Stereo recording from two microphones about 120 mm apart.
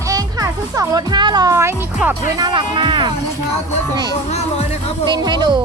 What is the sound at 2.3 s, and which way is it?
Speech, 35° right (ahead or behind).